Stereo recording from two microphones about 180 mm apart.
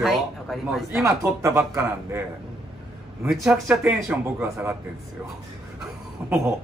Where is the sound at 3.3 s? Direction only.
5° right (ahead or behind).